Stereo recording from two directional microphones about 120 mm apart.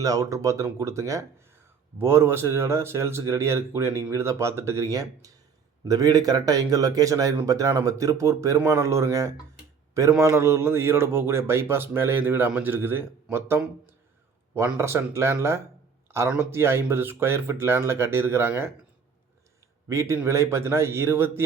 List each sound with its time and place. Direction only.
0.0 s speech: 30° right (ahead or behind)
16.0 s a sound: 25° right (ahead or behind)
16.4 s speech: 20° right (ahead or behind)
19.9 s speech: 25° right (ahead or behind)